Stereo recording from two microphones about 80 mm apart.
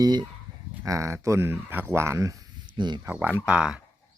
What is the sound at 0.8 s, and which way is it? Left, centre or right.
Speech, right.